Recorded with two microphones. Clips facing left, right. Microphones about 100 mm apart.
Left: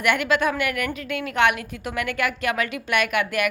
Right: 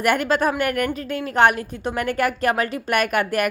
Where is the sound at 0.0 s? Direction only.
40° right (ahead or behind).